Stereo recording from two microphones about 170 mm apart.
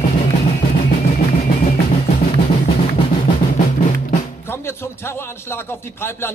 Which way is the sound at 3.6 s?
45° left (ahead or behind).